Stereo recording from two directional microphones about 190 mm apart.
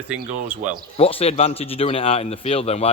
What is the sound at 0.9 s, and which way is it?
Speech, 30° left (ahead or behind).